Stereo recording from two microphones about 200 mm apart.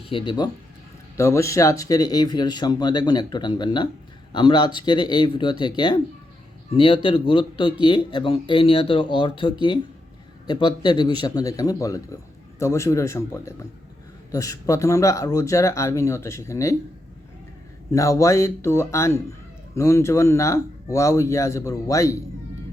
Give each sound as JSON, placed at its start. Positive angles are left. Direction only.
{"t": 0.1, "sound": "speech", "side_deg": 25}
{"t": 17.9, "sound": "speech", "side_deg": 15}